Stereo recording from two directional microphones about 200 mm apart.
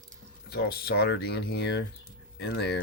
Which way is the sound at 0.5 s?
50° left (ahead or behind).